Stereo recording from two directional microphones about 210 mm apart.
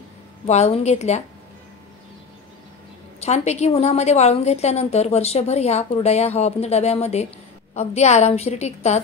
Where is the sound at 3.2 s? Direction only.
30° left (ahead or behind).